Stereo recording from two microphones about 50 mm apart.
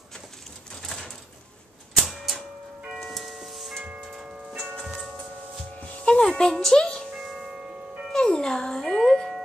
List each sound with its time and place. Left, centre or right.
2.0 s printer: centre
2.9 s a sound: centre
4.8 s music: centre
5.8 s music: left
6.1 s music: centre
7.2 s tubular bells: centre
8.1 s dog: centre